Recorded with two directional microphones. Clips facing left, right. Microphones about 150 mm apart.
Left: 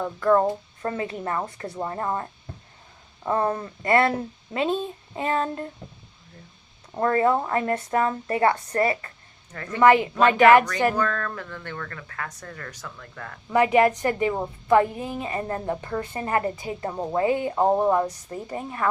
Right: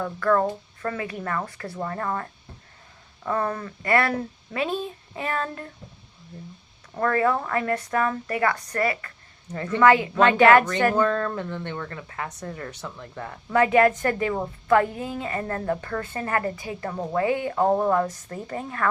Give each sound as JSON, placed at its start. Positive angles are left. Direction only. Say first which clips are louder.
{"t": 0.0, "sound": "a woman's voice", "louder": "left 2 dB", "side_deg": 20}
{"t": 6.9, "sound": "a woman's voice", "louder": "left 2 dB", "side_deg": 25}
{"t": 10.9, "sound": "speech", "louder": "right 4 dB", "side_deg": -25}
{"t": 13.5, "sound": "a woman's voice", "louder": "even", "side_deg": 15}